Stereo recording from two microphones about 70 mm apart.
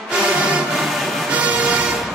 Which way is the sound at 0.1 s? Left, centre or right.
Centre.